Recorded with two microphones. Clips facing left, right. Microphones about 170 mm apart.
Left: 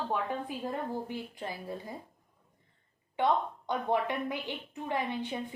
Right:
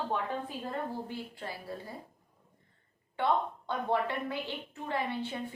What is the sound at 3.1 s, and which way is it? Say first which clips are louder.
A woman's voice: left 1 dB; 15° left (ahead or behind).